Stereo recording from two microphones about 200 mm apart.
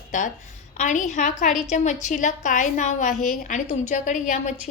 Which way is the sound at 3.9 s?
40° left (ahead or behind).